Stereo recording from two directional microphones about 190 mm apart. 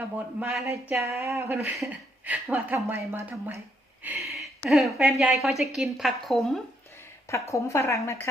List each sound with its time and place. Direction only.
0.3 s a woman's voice: 5° right (ahead or behind)
7.3 s a woman's voice: 15° left (ahead or behind)